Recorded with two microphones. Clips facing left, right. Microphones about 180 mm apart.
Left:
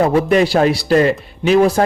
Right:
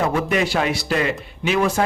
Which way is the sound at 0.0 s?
35° left (ahead or behind).